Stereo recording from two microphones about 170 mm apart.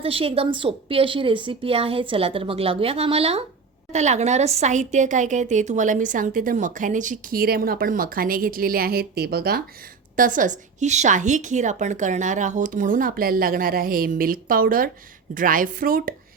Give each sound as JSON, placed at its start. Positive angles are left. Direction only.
{"t": 0.0, "sound": "a woman's voice", "side_deg": -35}
{"t": 10.2, "sound": "a woman's voice", "side_deg": -50}